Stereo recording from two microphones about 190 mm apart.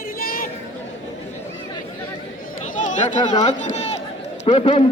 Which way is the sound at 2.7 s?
40° left (ahead or behind).